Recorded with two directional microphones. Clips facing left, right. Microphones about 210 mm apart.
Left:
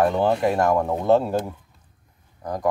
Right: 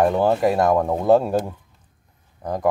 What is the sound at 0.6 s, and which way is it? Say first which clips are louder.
Speech: right 2 dB; 30° right (ahead or behind).